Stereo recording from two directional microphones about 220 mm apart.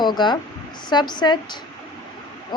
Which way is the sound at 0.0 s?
20° left (ahead or behind).